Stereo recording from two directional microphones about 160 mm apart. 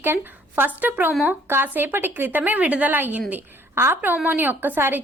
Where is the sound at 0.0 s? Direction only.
15° right (ahead or behind).